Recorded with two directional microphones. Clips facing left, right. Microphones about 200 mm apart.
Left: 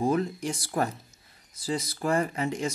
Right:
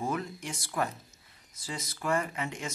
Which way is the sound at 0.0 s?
35° left (ahead or behind).